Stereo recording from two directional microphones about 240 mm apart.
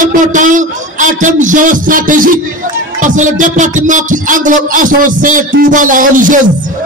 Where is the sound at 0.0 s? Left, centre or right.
Right.